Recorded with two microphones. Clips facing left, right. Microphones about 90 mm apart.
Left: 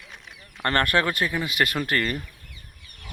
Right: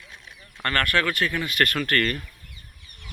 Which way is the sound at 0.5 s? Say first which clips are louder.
Left 2 dB; 20° left (ahead or behind).